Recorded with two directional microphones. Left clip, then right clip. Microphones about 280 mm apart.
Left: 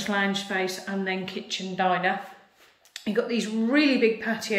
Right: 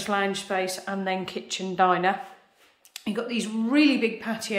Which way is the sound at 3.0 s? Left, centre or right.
Centre.